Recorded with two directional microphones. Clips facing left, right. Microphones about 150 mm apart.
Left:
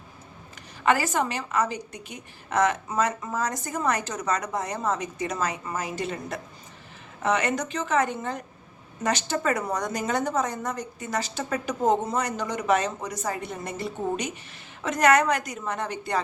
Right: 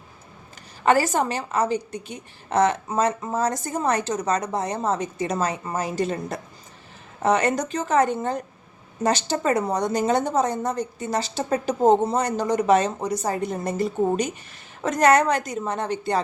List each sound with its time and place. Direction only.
0.9 s a woman's voice: 35° right (ahead or behind)